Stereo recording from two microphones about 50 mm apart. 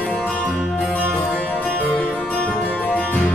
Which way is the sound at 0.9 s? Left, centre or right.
Left.